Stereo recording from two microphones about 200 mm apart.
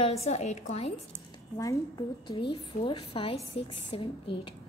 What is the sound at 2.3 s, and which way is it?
A woman's voice, 25° left (ahead or behind).